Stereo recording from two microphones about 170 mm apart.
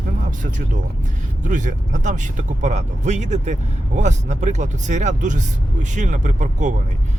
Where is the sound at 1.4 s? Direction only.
50° right (ahead or behind).